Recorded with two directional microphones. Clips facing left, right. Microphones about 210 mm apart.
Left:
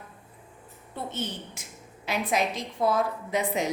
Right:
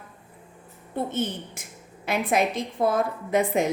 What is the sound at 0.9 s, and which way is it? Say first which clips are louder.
A woman's voice: right 6 dB; 50° right (ahead or behind).